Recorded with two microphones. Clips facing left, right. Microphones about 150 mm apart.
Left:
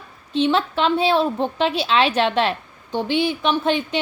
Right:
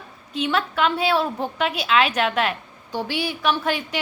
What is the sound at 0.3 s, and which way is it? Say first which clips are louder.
A woman's voice: left 4 dB; 25° left (ahead or behind).